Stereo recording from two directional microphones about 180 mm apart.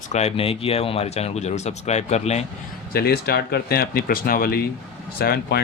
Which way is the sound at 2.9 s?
60° left (ahead or behind).